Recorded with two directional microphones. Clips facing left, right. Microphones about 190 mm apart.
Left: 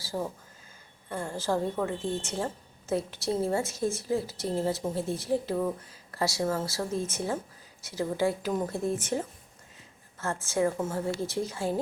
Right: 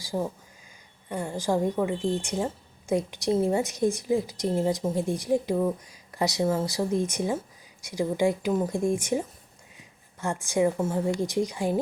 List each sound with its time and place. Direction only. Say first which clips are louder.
0.0 s a woman's voice: right 3 dB; 15° right (ahead or behind)